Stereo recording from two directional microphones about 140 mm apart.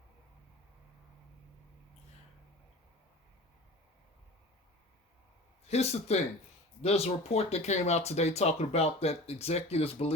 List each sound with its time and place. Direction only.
5.6 s speech: 50° left (ahead or behind)